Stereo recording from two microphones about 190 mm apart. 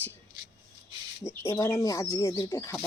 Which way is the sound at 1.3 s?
15° left (ahead or behind).